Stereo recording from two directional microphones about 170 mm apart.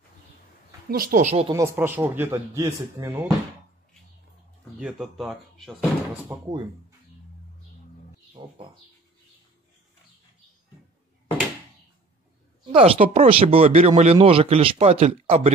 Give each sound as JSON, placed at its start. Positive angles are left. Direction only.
{"t": 0.8, "sound": "speech", "side_deg": -60}
{"t": 1.2, "sound": "speech", "side_deg": -40}
{"t": 1.5, "sound": "a man's voice", "side_deg": -15}
{"t": 4.7, "sound": "speech", "side_deg": -5}
{"t": 6.3, "sound": "a man's voice", "side_deg": -10}
{"t": 8.4, "sound": "speech", "side_deg": -30}
{"t": 12.7, "sound": "speech", "side_deg": -35}